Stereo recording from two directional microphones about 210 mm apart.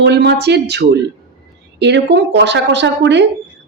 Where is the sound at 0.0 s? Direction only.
55° right (ahead or behind).